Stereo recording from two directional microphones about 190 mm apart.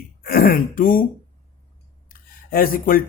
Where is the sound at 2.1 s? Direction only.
50° left (ahead or behind).